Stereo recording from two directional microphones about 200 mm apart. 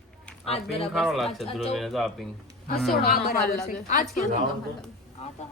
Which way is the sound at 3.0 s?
45° left (ahead or behind).